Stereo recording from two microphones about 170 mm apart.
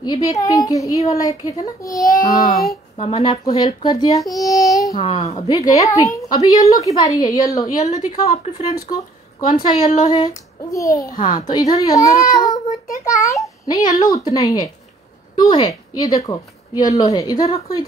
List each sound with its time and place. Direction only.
0.0 s a child's voice: 20° left (ahead or behind)
2.5 s speech: centre (ahead or behind)
3.0 s a child's voice: 35° left (ahead or behind)
4.4 s child singing: 20° left (ahead or behind)
4.7 s a sound: 20° left (ahead or behind)
5.0 s speech: 40° left (ahead or behind)
5.5 s a child's voice: 20° left (ahead or behind)
7.6 s a woman's voice: 45° left (ahead or behind)
9.5 s a woman's voice: 50° left (ahead or behind)
10.1 s a child's voice: 20° left (ahead or behind)